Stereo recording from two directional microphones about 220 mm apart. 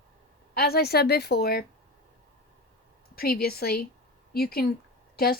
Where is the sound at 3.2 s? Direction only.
45° left (ahead or behind).